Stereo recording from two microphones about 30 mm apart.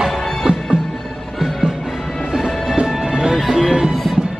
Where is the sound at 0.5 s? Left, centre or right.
Right.